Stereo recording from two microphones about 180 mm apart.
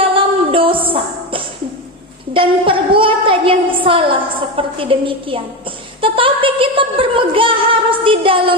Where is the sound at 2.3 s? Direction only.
30° right (ahead or behind).